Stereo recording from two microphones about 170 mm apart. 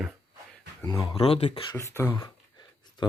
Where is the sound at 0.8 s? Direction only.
25° left (ahead or behind).